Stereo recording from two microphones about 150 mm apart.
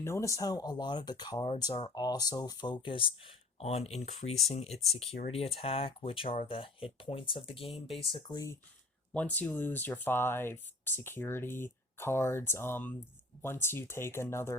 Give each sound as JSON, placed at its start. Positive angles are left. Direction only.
{"t": 0.0, "sound": "speech", "side_deg": 20}
{"t": 8.1, "sound": "speech", "side_deg": 25}
{"t": 9.1, "sound": "speech", "side_deg": 10}